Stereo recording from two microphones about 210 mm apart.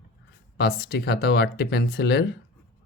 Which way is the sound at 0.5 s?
50° left (ahead or behind).